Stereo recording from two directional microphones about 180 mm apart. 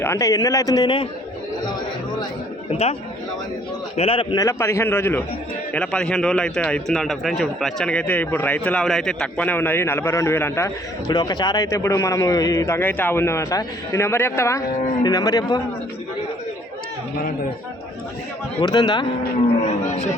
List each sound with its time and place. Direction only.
0.0 s a man's voice: 15° left (ahead or behind)
2.6 s a man's voice: 35° left (ahead or behind)
3.9 s a man's voice: 35° left (ahead or behind)
4.4 s a man's voice: 15° left (ahead or behind)
11.1 s a man's voice: 25° left (ahead or behind)
18.6 s a man's voice: 25° left (ahead or behind)
19.6 s a man's voice: 40° left (ahead or behind)